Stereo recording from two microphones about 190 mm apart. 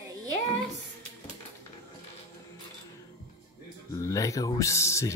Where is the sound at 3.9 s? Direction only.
15° left (ahead or behind).